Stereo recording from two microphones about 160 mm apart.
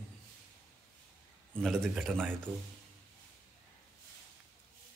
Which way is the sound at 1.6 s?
Centre (ahead or behind).